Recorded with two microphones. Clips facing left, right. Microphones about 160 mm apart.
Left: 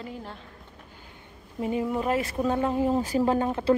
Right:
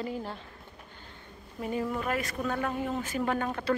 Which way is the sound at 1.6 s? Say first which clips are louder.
Left 5 dB; 20° left (ahead or behind).